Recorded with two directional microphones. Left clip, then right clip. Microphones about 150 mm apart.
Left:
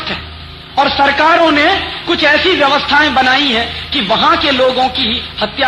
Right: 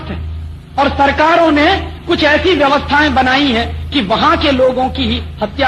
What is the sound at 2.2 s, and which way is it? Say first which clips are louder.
Speech: left 1 dB; 15° left (ahead or behind).